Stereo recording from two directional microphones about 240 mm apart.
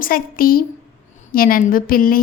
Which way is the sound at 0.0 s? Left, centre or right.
Left.